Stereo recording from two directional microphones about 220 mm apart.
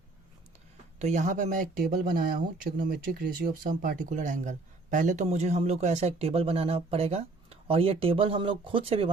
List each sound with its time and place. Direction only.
0.9 s speech: 30° right (ahead or behind)